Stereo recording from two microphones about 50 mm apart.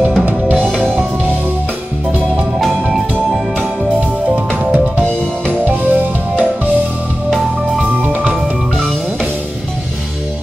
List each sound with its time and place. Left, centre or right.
0.2 s music: right
4.5 s music: right